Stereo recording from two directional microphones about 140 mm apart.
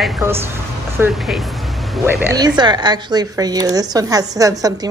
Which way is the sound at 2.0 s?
15° right (ahead or behind).